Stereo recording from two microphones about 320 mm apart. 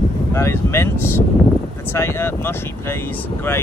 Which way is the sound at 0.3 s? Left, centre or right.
Centre.